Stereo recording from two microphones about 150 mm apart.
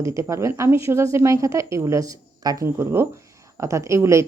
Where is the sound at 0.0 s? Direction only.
20° right (ahead or behind).